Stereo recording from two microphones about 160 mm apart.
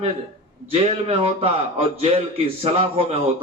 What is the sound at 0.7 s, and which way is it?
Speech, 40° right (ahead or behind).